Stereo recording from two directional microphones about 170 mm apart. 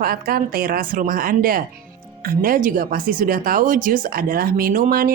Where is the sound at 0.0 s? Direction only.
60° right (ahead or behind).